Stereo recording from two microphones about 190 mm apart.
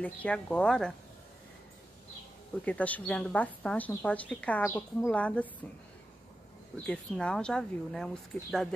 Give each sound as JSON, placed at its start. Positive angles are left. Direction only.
{"t": 0.0, "sound": "speech", "side_deg": 5}
{"t": 2.6, "sound": "speech", "side_deg": 5}
{"t": 6.9, "sound": "speech", "side_deg": 5}